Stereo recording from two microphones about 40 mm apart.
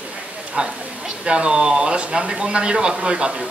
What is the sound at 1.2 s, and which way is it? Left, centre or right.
Speech, right.